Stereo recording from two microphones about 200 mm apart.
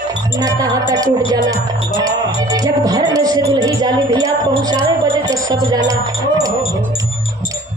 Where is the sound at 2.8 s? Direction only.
20° right (ahead or behind).